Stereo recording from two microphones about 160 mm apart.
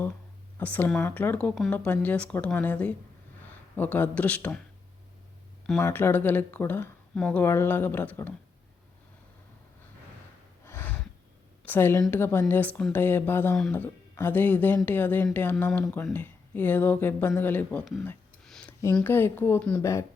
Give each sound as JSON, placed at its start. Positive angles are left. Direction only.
{"t": 0.6, "sound": "speech", "side_deg": 10}
{"t": 5.8, "sound": "speech", "side_deg": 15}
{"t": 10.7, "sound": "a sound", "side_deg": 15}
{"t": 11.6, "sound": "a woman's voice", "side_deg": 15}
{"t": 18.4, "sound": "a sound", "side_deg": 0}
{"t": 18.9, "sound": "speech", "side_deg": 15}